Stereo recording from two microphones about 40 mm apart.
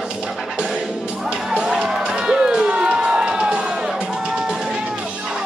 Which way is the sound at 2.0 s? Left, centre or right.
Centre.